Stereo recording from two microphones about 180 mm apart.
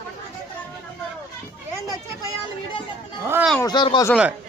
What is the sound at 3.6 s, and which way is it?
Speech, 25° left (ahead or behind).